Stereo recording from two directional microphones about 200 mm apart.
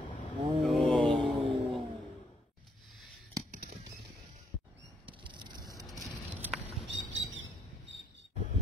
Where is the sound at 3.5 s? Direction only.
50° right (ahead or behind).